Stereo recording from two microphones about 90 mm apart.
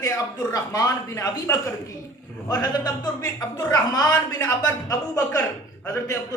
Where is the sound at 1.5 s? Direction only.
20° left (ahead or behind).